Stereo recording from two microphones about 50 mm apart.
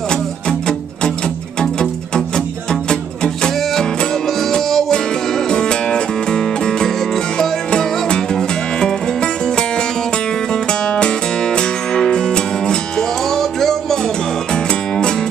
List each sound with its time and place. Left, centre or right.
0.1 s music: centre